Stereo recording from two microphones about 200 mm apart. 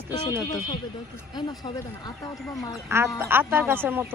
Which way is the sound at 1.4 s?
20° left (ahead or behind).